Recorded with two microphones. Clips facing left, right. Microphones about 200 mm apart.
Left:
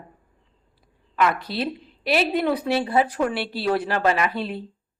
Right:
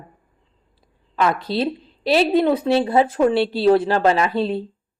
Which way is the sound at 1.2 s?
30° right (ahead or behind).